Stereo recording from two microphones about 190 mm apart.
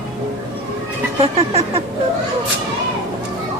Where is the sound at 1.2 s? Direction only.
30° right (ahead or behind).